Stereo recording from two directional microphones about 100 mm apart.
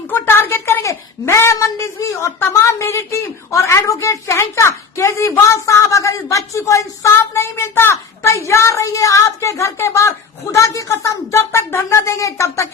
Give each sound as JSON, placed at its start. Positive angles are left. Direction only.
{"t": 0.1, "sound": "a woman's voice", "side_deg": 25}